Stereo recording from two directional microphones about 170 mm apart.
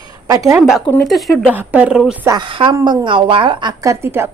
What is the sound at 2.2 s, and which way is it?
A woman's voice, 25° right (ahead or behind).